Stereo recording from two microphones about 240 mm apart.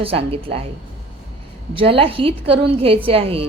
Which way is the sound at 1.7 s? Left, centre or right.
Right.